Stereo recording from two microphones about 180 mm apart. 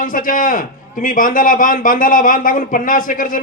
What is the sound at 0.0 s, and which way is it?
A man's voice, 50° left (ahead or behind).